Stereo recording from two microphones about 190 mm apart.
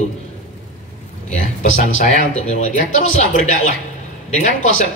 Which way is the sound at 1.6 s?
40° left (ahead or behind).